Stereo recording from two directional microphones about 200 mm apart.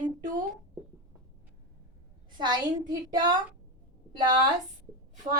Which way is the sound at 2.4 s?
20° right (ahead or behind).